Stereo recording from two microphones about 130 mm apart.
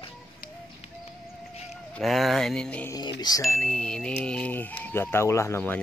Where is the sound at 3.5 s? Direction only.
10° left (ahead or behind).